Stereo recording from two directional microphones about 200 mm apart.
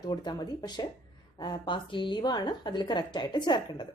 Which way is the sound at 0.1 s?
20° left (ahead or behind).